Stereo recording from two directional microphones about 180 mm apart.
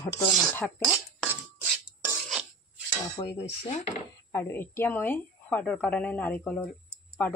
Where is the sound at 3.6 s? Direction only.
35° left (ahead or behind).